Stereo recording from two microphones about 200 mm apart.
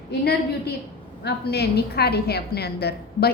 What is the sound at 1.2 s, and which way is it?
A woman's voice, 55° left (ahead or behind).